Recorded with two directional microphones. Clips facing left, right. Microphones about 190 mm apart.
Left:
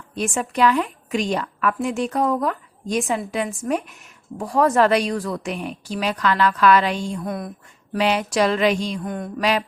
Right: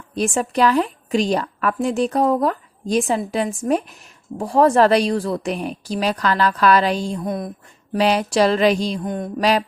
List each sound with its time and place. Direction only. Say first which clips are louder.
0.2 s a woman's voice: right 2 dB; 35° right (ahead or behind)
7.2 s speech: right 3 dB; 20° right (ahead or behind)
7.9 s a woman's voice: right 3 dB; 35° right (ahead or behind)
9.0 s speech: right 3 dB; 20° right (ahead or behind)
9.4 s a woman's voice: right 3 dB; 35° right (ahead or behind)